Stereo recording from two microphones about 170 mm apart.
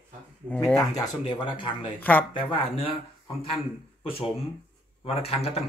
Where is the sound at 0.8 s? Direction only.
25° left (ahead or behind).